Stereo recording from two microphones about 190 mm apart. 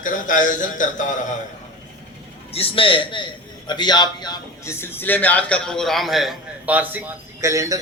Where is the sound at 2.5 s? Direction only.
30° left (ahead or behind).